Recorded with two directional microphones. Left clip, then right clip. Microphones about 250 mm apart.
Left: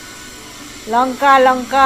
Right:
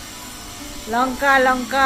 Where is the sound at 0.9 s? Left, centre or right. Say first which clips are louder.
Left 5 dB; centre.